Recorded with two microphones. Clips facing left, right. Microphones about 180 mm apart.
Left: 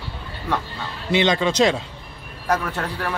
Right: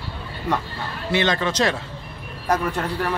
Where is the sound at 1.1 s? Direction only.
15° left (ahead or behind).